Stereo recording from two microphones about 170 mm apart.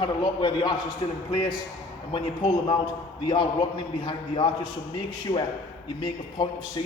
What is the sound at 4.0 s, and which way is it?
Speech, 30° left (ahead or behind).